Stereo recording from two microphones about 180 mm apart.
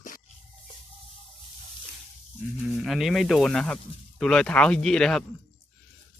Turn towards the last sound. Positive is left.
turn(degrees=5)  # may be behind; listen again after turning